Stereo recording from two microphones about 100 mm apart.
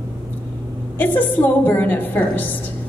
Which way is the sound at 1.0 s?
20° left (ahead or behind).